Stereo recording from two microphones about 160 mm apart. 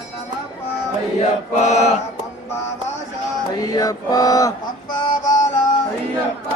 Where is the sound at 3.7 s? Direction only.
25° left (ahead or behind).